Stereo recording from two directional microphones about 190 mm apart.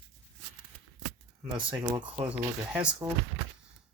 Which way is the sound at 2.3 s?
5° right (ahead or behind).